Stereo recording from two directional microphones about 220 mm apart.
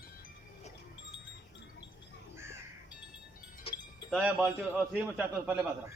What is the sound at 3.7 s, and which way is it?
Wind chime, 25° left (ahead or behind).